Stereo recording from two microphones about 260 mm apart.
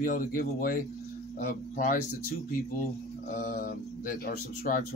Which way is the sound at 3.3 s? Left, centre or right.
Left.